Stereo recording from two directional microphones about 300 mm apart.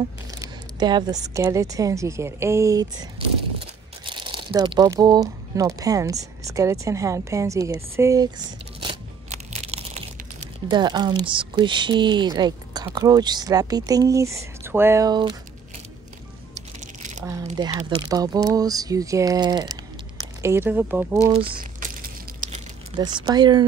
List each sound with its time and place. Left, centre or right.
0.4 s speech: centre
8.8 s crunch: right
10.7 s speech: centre
16.8 s crumpling: right
17.2 s speech: centre; by 22.6 s right
22.9 s speech: centre